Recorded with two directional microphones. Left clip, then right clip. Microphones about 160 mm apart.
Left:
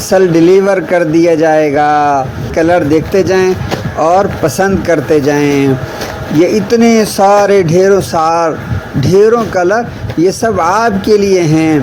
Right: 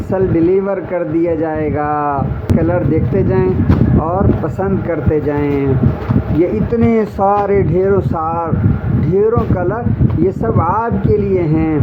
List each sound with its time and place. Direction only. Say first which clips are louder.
0.1 s speech: left 7 dB; 40° left (ahead or behind)
4.6 s speech: left 8 dB; 40° left (ahead or behind)
9.2 s speech: left 6 dB; 50° left (ahead or behind)
11.1 s speech: left 6 dB; 35° left (ahead or behind)